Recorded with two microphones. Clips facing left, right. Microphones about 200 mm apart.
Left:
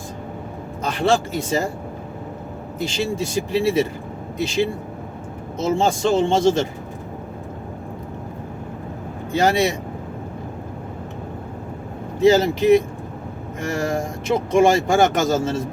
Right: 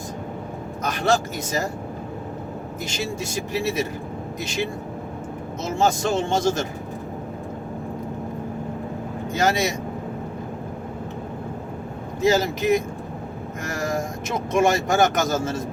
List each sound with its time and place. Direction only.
0.8 s speech: 30° left (ahead or behind)
2.8 s speech: 30° left (ahead or behind)
9.3 s speech: 30° left (ahead or behind)
12.2 s speech: 30° left (ahead or behind)